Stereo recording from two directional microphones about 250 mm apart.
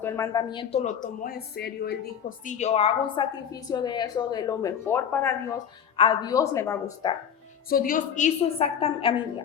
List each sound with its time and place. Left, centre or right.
0.0 s speech: centre; by 2.0 s left
2.4 s a woman's voice: left; by 5.3 s centre
6.0 s a woman's voice: centre
7.7 s speech: left